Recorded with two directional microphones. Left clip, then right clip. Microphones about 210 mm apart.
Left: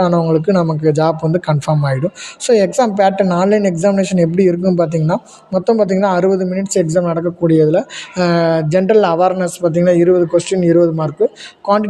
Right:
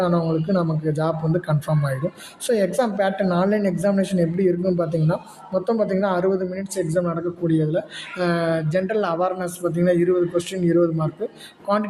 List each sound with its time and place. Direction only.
0.0 s a woman's voice: 30° left (ahead or behind)